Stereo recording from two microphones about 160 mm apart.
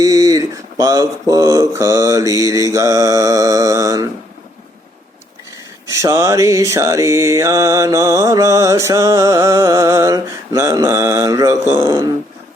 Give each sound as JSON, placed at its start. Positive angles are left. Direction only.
{"t": 0.0, "sound": "mantra", "side_deg": -20}
{"t": 6.0, "sound": "mantra", "side_deg": -20}